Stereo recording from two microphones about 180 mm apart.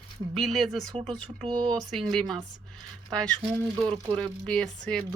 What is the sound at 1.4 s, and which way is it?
Speech, 25° right (ahead or behind).